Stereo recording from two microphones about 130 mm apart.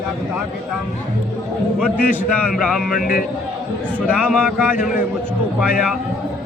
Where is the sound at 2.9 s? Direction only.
90° left.